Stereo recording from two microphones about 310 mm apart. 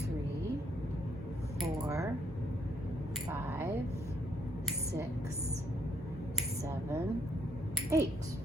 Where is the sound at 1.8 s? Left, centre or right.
Centre.